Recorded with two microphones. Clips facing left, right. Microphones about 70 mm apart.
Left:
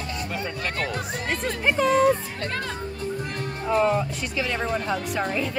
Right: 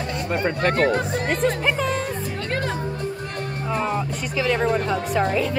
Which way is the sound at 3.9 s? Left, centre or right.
Centre.